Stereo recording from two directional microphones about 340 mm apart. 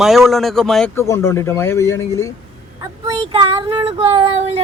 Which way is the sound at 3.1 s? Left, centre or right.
Centre.